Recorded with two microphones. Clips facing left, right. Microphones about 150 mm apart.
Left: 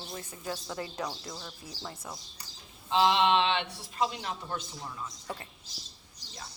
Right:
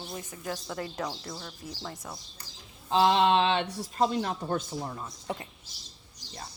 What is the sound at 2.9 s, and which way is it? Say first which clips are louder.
Speech: right 2 dB; 40° right (ahead or behind).